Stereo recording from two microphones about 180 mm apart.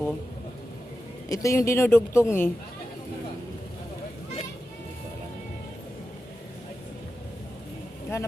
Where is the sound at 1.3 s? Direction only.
15° left (ahead or behind).